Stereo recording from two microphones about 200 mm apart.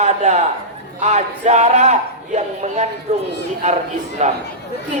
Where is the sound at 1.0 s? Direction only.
35° right (ahead or behind).